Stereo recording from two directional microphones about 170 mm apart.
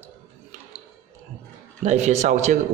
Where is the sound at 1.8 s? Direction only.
45° right (ahead or behind).